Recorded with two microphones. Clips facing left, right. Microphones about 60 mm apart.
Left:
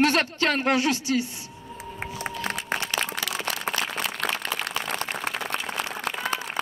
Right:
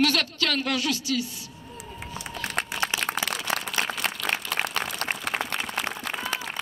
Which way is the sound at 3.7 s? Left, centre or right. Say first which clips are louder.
Left 4 dB; left.